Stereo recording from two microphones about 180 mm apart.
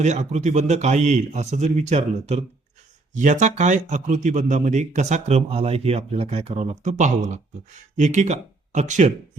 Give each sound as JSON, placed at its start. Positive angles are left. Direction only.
{"t": 0.0, "sound": "a man's voice", "side_deg": -40}